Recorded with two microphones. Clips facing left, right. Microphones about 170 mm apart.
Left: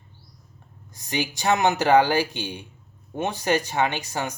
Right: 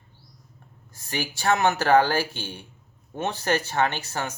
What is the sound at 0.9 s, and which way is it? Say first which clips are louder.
Speech: left 3 dB; 20° left (ahead or behind).